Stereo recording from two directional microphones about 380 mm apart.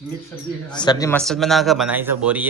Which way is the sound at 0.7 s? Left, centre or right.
Centre.